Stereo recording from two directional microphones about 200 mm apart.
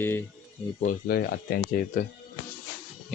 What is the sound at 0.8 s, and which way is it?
Speech, 45° left (ahead or behind).